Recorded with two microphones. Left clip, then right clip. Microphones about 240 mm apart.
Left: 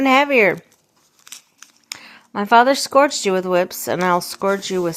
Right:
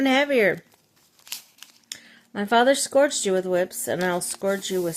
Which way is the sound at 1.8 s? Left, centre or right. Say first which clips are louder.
Left 7 dB; centre.